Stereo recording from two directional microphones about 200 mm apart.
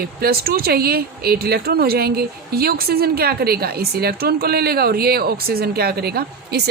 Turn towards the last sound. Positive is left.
turn(degrees=-55)  # may be behind; listen again after turning